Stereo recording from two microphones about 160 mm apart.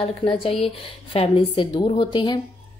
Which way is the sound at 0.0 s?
35° left (ahead or behind).